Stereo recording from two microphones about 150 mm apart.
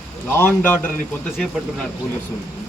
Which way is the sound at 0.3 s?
15° left (ahead or behind).